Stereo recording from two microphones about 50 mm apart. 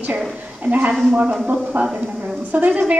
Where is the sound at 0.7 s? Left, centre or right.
Right.